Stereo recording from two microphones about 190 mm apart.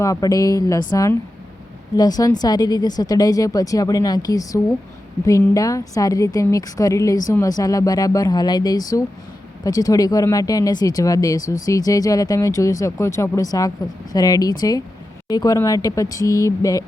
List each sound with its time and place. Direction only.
0.0 s a woman's voice: 20° left (ahead or behind)